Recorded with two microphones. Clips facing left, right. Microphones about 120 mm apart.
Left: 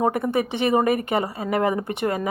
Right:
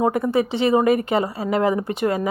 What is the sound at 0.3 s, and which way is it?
A woman's voice, 55° left (ahead or behind).